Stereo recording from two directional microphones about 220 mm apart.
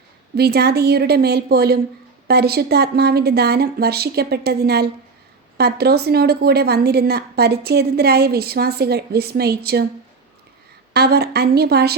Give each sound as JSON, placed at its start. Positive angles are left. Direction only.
{"t": 0.3, "sound": "a woman's voice", "side_deg": -45}
{"t": 10.9, "sound": "a woman's voice", "side_deg": -45}